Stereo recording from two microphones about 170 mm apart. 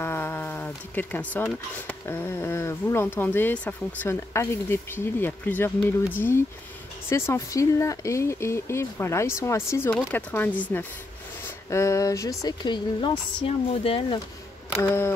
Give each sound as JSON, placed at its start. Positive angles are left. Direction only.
{"t": 0.0, "sound": "speech", "side_deg": 15}
{"t": 14.8, "sound": "speech", "side_deg": 15}